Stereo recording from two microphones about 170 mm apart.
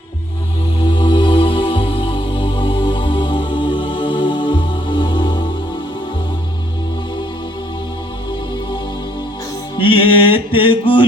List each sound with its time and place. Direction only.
0.9 s music: 30° left (ahead or behind)
9.7 s music: 30° left (ahead or behind)